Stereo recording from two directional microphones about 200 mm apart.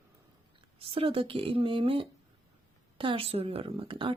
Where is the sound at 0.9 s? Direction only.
30° right (ahead or behind).